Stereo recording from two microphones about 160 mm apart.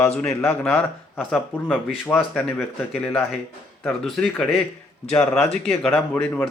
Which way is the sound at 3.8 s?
5° left (ahead or behind).